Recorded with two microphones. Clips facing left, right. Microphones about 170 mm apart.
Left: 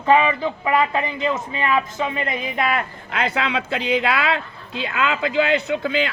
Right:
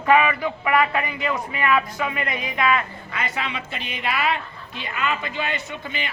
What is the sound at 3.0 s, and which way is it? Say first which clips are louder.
Speech: left 6 dB; 85° left.